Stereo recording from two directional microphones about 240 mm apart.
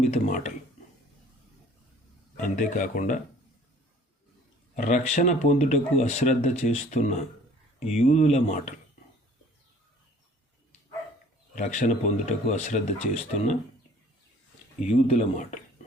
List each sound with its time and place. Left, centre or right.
0.0 s speech: left
2.6 s speech: left
4.7 s speech: left
11.5 s speech: left
14.8 s speech: left